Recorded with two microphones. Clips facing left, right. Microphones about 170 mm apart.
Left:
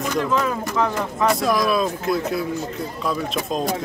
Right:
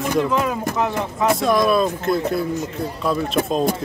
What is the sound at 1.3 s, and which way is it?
Speech, centre (ahead or behind).